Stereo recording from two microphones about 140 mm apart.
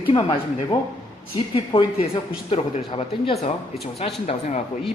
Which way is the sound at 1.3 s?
35° left (ahead or behind).